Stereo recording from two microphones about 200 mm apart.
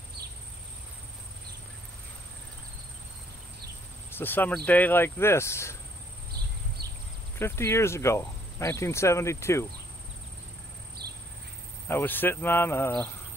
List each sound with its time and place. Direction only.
4.1 s speech: 10° left (ahead or behind)
7.3 s speech: 10° left (ahead or behind)
11.0 s a sound: 55° right (ahead or behind)
11.9 s speech: 10° left (ahead or behind)